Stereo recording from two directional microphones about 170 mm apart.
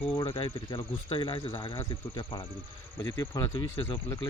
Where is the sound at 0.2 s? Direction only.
35° left (ahead or behind).